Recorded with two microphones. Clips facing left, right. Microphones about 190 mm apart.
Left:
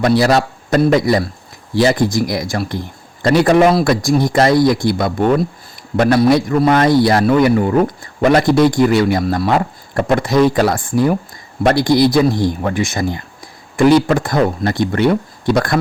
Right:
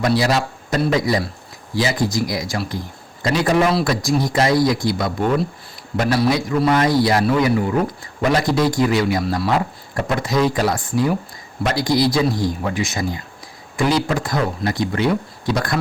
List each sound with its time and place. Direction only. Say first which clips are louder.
0.0 s speech: left 5 dB; 55° left (ahead or behind)